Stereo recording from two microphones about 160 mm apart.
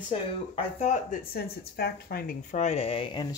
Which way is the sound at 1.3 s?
75° left (ahead or behind).